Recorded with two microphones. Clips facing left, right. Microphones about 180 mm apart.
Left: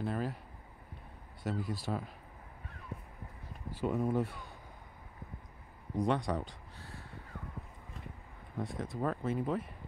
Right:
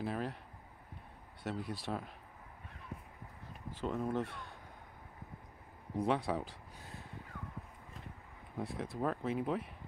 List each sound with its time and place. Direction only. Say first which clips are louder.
0.0 s speech: left 2 dB; centre (ahead or behind)
1.4 s speech: left 3 dB; centre (ahead or behind)
3.7 s speech: left 4 dB; 10° left (ahead or behind)
5.9 s speech: left 1 dB; 5° right (ahead or behind)
6.8 s a sound: left 1 dB; 20° right (ahead or behind)
8.5 s speech: left 1 dB; centre (ahead or behind)